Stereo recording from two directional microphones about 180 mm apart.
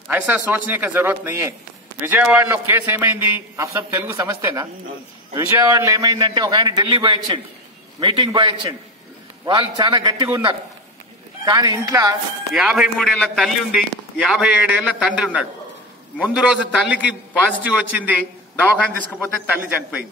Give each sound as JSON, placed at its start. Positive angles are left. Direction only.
{"t": 0.1, "sound": "a man's voice", "side_deg": -10}
{"t": 12.5, "sound": "a man's voice", "side_deg": 0}